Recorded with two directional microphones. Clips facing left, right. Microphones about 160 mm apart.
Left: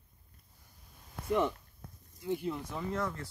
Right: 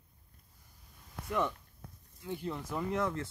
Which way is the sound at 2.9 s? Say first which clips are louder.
Right 2 dB; 20° right (ahead or behind).